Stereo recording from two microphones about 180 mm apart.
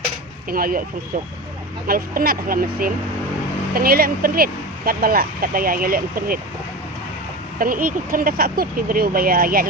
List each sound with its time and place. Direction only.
0.5 s speech: 55° right (ahead or behind)
1.9 s speech: 55° right (ahead or behind)
7.6 s speech: 50° right (ahead or behind)